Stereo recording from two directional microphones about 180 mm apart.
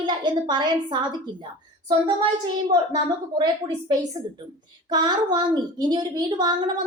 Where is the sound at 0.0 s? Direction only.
25° right (ahead or behind).